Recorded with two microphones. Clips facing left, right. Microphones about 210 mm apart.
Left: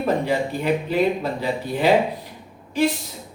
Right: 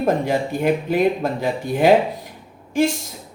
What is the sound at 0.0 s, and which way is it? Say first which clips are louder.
Speech: right 2 dB; 50° right (ahead or behind).